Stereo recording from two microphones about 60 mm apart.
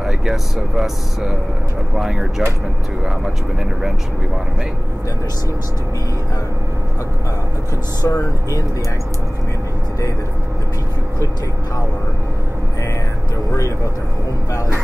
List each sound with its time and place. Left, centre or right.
0.0 s speech: centre
8.0 s speech: left